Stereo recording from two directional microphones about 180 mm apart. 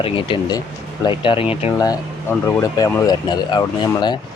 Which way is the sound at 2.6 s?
20° left (ahead or behind).